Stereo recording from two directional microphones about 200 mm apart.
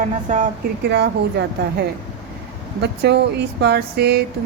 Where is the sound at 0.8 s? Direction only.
55° right (ahead or behind).